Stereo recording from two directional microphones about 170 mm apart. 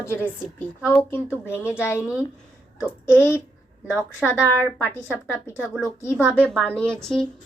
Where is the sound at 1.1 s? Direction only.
15° left (ahead or behind).